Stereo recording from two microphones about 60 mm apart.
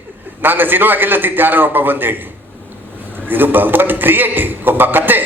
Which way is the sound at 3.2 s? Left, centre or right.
Right.